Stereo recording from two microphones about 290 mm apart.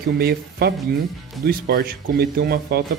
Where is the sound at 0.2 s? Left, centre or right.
Right.